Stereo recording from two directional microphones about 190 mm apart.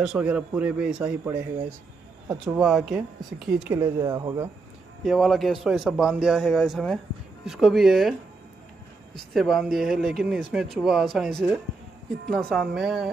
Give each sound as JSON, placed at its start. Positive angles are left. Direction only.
{"t": 0.0, "sound": "a man's voice", "side_deg": -5}
{"t": 4.0, "sound": "speech", "side_deg": -20}
{"t": 5.0, "sound": "a man's voice", "side_deg": 0}
{"t": 9.3, "sound": "a man's voice", "side_deg": 0}